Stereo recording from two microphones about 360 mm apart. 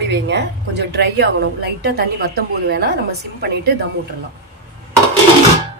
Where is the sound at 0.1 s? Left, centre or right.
Right.